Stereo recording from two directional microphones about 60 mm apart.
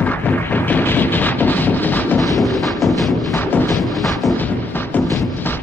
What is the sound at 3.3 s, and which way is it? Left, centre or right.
Artillery fire, left.